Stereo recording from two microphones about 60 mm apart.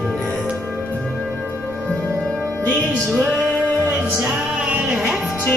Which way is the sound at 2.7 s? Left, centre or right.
Centre.